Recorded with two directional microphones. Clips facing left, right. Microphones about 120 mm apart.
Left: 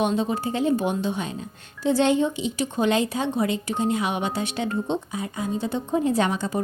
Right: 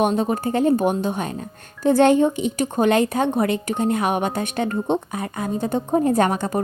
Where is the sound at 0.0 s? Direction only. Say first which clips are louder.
Right 4 dB; 50° right (ahead or behind).